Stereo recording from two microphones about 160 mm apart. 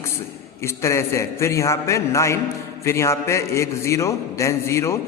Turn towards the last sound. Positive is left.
turn(degrees=20)  # may be behind; listen again after turning